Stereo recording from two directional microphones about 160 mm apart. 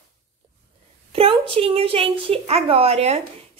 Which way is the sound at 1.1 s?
35° right (ahead or behind).